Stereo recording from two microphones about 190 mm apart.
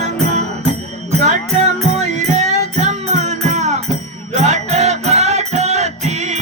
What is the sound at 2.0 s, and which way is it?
Music, 35° right (ahead or behind).